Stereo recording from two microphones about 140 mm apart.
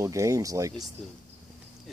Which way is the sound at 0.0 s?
25° right (ahead or behind).